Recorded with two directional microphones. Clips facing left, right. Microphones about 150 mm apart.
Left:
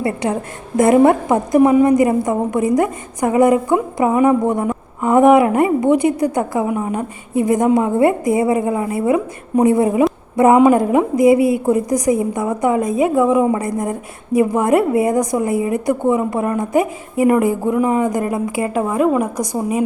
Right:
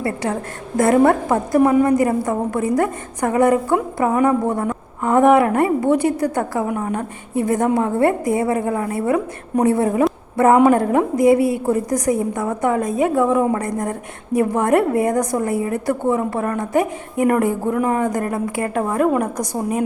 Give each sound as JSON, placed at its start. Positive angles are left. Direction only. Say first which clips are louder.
{"t": 0.0, "sound": "a woman's voice", "louder": "left 3 dB", "side_deg": 20}